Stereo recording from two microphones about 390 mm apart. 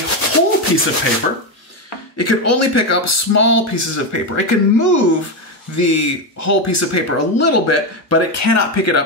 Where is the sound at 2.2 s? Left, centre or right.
Left.